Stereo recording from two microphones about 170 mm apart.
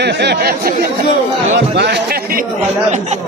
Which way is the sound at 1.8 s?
90° right.